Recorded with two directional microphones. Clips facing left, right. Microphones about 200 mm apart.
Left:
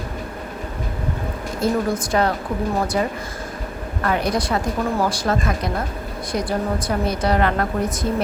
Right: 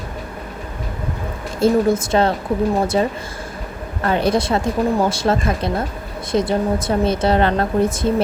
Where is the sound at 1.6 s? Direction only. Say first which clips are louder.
Right 6 dB; 25° right (ahead or behind).